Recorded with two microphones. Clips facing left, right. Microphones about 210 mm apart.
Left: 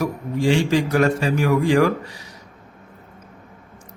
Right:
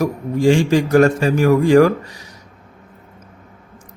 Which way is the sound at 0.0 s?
45° right (ahead or behind).